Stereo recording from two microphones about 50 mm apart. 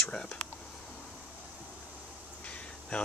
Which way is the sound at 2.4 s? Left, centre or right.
Left.